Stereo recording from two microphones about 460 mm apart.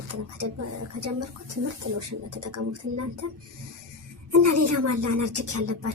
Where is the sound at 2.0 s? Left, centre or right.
Right.